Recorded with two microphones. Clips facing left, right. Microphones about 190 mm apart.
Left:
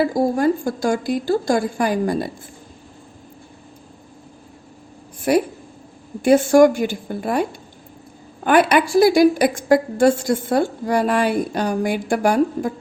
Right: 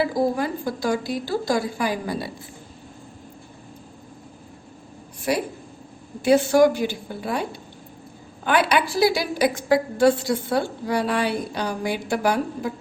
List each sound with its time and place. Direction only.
0.0 s a woman's voice: 45° left (ahead or behind)
5.3 s a woman's voice: 55° left (ahead or behind)
8.4 s a woman's voice: 50° left (ahead or behind)